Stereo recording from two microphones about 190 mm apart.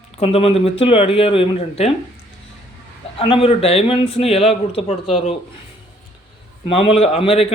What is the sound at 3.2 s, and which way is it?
A man's voice, 30° left (ahead or behind).